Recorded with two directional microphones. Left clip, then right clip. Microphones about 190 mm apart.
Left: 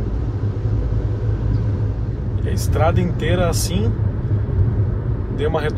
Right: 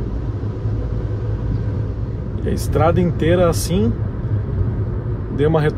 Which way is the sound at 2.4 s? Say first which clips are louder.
Right 3 dB; 55° right (ahead or behind).